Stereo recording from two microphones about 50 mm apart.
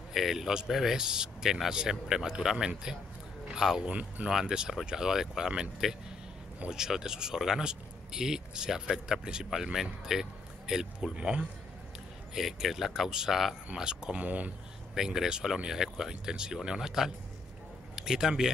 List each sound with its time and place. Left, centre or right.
0.1 s speech: centre
3.8 s speech: right
4.3 s speech: centre
11.1 s speech: right
12.4 s speech: centre
13.7 s speech: centre
14.2 s speech: right
15.0 s speech: centre